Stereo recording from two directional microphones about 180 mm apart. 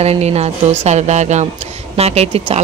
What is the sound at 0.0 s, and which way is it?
Speech, 35° right (ahead or behind).